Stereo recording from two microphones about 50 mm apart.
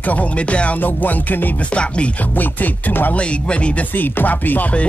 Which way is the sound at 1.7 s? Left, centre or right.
Left.